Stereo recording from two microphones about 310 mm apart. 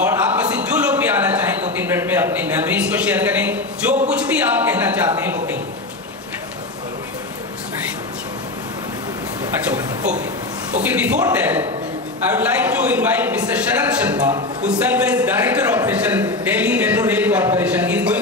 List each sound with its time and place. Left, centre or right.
0.0 s a sound: centre
1.8 s a man's voice: centre
10.8 s a man's voice: centre